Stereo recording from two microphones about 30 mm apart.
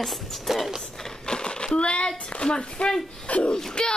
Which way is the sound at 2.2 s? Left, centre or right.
Left.